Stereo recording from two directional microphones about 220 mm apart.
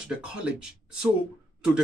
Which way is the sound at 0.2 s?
5° right (ahead or behind).